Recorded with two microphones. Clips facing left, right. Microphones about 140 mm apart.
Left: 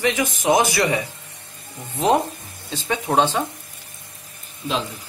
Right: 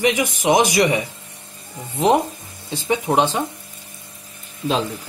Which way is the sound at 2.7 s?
15° right (ahead or behind).